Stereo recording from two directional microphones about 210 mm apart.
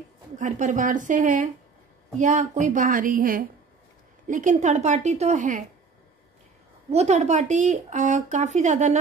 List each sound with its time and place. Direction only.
0.4 s speech: 35° right (ahead or behind)
6.9 s speech: 30° right (ahead or behind)